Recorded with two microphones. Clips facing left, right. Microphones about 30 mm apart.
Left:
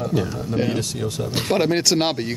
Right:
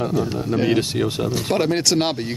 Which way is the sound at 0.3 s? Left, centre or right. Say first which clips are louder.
Right 3 dB; right.